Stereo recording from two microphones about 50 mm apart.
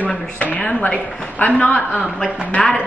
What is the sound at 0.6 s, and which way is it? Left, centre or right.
Speech, centre.